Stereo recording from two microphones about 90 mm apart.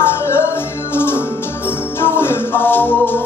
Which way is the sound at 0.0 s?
25° left (ahead or behind).